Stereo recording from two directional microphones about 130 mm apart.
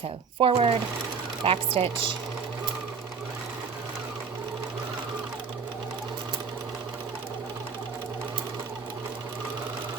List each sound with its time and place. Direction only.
0.3 s a woman's voice: 45° right (ahead or behind)